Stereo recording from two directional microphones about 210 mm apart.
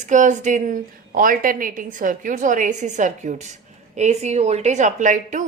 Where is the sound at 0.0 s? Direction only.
35° right (ahead or behind).